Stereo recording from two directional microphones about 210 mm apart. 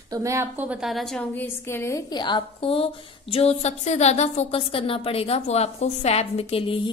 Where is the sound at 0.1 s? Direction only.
15° right (ahead or behind).